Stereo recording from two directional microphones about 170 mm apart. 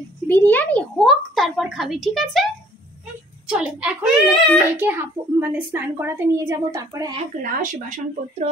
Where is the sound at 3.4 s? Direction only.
5° right (ahead or behind).